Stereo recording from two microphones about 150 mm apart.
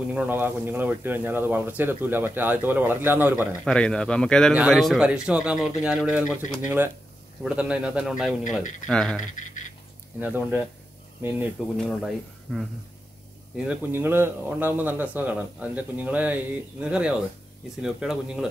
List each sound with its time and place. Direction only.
0.1 s speech: 10° right (ahead or behind)
3.6 s speech: 5° left (ahead or behind)
7.4 s speech: 5° right (ahead or behind)
9.2 s speech: 55° left (ahead or behind)
10.2 s speech: 10° right (ahead or behind)
11.7 s speech: 5° left (ahead or behind)
13.6 s speech: 10° right (ahead or behind)